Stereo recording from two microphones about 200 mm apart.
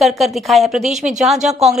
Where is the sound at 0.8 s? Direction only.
35° right (ahead or behind).